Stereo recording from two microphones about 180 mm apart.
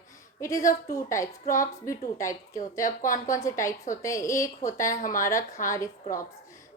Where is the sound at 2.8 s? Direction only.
45° left (ahead or behind).